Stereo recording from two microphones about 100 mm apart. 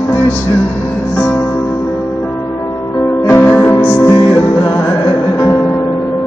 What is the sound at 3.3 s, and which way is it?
Music, 20° left (ahead or behind).